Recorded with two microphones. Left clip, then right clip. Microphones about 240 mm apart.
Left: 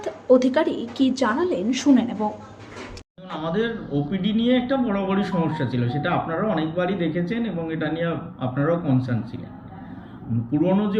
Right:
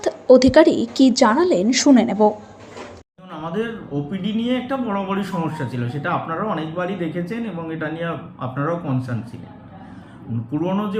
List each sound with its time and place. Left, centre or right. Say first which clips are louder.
0.0 s a woman's voice: right 5 dB; right
4.1 s speech: left 2 dB; centre
10.6 s speech: left 2 dB; centre